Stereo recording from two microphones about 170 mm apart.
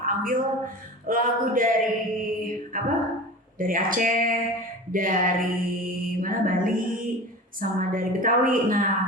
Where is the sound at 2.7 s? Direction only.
55° right (ahead or behind).